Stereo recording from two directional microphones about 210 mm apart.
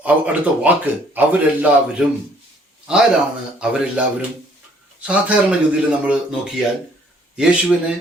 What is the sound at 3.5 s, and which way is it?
Speech, 5° right (ahead or behind).